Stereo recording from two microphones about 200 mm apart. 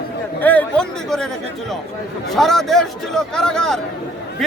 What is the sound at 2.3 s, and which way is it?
A man's voice, centre (ahead or behind).